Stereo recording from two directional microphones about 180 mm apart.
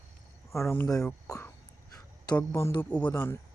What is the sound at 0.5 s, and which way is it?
Speech, 15° left (ahead or behind).